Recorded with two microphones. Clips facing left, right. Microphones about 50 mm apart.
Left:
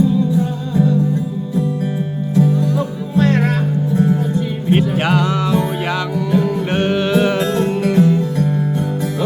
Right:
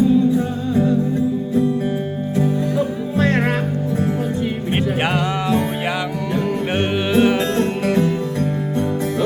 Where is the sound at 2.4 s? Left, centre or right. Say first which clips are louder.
Left 3 dB; right.